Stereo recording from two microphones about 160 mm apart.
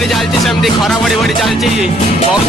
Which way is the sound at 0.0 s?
Centre (ahead or behind).